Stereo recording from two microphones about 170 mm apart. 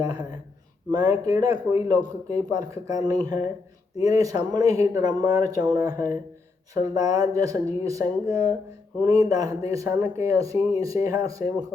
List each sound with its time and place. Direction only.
0.0 s speech: 20° right (ahead or behind)